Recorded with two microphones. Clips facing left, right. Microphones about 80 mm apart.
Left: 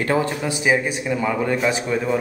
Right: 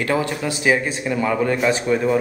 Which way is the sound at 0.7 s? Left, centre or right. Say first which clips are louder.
Even; centre.